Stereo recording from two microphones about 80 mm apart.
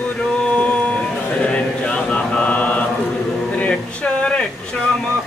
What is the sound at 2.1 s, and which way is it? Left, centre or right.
Mantra, centre.